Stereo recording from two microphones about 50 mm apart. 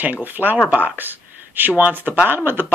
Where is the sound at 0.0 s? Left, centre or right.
Right.